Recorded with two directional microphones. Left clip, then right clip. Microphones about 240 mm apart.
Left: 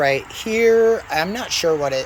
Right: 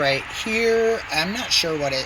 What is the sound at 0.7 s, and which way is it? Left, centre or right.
Speech, centre.